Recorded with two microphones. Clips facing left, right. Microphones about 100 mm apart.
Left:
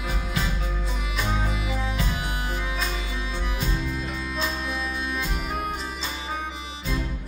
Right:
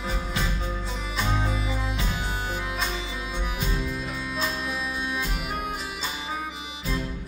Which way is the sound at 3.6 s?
Centre (ahead or behind).